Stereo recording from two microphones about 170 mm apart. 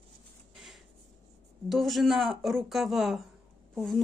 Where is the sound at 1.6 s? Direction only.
Centre (ahead or behind).